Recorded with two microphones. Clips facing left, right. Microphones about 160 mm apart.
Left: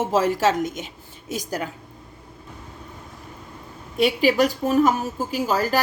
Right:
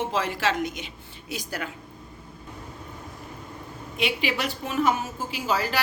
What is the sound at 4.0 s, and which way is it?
A woman's voice, 40° left (ahead or behind).